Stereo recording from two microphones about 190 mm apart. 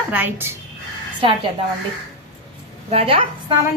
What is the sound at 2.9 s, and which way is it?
Speech, 30° right (ahead or behind).